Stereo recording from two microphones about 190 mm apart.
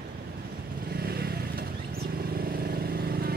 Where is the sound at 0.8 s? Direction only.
55° right (ahead or behind).